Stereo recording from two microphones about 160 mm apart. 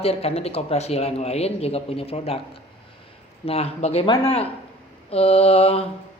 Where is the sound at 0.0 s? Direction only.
40° left (ahead or behind).